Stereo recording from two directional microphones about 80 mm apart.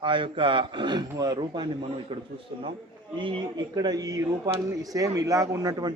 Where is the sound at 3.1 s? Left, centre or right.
Right.